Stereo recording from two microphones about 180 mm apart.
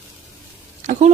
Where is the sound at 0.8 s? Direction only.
45° right (ahead or behind).